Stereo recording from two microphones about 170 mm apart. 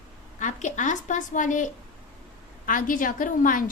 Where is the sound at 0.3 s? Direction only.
45° left (ahead or behind).